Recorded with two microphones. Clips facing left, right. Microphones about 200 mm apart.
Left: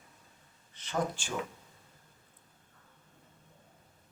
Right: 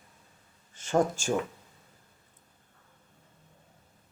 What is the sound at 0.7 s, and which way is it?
Speech, 45° right (ahead or behind).